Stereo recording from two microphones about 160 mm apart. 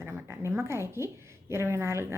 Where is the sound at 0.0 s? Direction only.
15° right (ahead or behind).